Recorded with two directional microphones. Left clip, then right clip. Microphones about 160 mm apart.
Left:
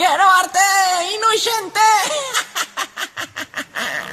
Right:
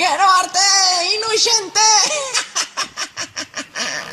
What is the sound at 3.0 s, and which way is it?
Honk, 25° right (ahead or behind).